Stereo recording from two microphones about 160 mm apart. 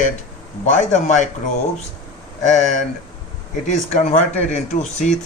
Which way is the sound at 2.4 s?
50° left (ahead or behind).